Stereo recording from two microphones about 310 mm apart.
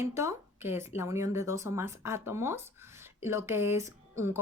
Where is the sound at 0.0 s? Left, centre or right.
Centre.